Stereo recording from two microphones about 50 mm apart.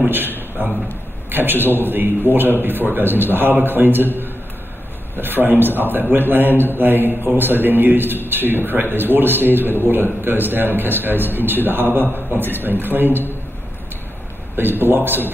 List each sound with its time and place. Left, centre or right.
0.6 s a man's voice: right
5.1 s a man's voice: right
14.6 s a man's voice: right